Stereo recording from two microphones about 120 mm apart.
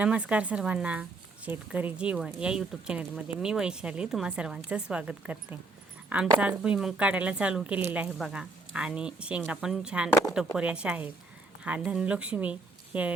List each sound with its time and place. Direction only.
0.0 s a woman's voice: 10° right (ahead or behind)